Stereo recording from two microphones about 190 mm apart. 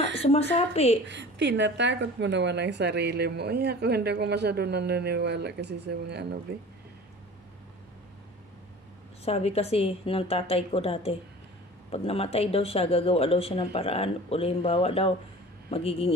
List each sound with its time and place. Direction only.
0.2 s speech: 30° left (ahead or behind)
1.0 s a woman's voice: 65° right (ahead or behind)
9.2 s speech: 30° left (ahead or behind)